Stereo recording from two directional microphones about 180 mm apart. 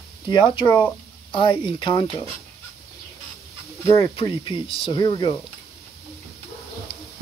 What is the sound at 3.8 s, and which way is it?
Speech, 15° left (ahead or behind).